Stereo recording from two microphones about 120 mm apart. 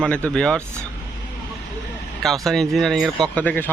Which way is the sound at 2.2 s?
Centre (ahead or behind).